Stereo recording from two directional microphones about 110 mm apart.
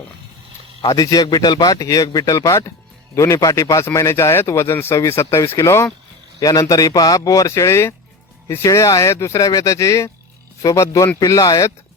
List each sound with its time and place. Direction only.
0.8 s a man's voice: 35° left (ahead or behind)